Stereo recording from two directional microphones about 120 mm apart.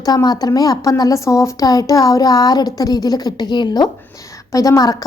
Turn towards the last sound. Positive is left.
turn(degrees=30)  # may be behind; listen again after turning